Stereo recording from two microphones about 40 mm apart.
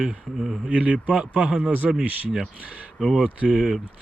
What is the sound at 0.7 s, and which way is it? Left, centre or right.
Speech, right.